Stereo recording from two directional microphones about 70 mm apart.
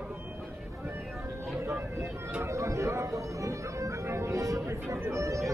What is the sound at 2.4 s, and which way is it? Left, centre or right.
Speech, right.